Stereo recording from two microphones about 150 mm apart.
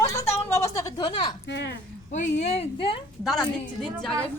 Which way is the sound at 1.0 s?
35° left (ahead or behind).